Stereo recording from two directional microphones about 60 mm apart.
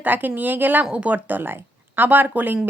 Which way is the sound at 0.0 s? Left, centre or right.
Right.